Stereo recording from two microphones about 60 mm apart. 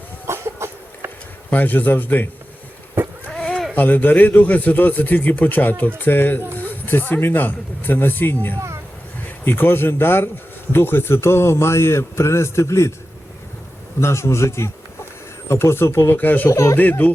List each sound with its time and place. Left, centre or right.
0.3 s chicken: right
1.5 s speech: left
3.0 s a sound: right
3.3 s sheep: centre
3.8 s a man's voice: left
14.0 s a man's voice: left
16.5 s speech: left